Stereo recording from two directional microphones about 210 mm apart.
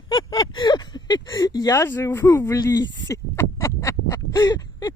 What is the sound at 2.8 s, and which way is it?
Speech, 60° left (ahead or behind).